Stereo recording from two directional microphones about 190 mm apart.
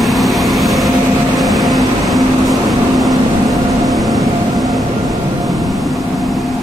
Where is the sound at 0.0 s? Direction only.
Centre (ahead or behind).